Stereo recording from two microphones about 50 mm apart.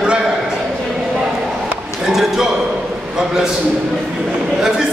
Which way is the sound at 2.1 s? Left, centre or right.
Centre.